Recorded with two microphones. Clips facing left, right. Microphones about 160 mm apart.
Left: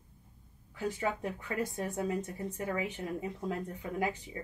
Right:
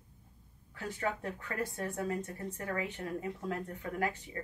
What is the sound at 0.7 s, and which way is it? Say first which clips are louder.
Speech: left 3 dB; 15° left (ahead or behind).